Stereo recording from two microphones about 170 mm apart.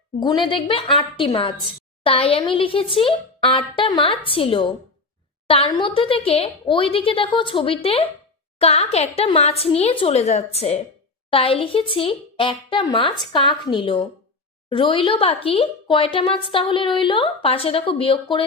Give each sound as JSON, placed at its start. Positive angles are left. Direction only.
{"t": 0.2, "sound": "a woman's voice", "side_deg": 25}